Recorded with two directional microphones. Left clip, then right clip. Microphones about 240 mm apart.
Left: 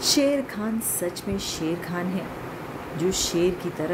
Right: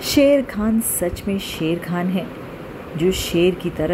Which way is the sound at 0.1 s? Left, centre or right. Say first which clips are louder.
Right 9 dB; centre.